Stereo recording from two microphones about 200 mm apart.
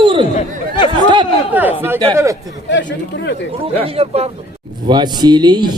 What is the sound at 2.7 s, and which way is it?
Speech, 60° left (ahead or behind).